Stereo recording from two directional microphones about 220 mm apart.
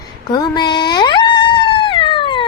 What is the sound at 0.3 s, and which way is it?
Dog, 20° left (ahead or behind).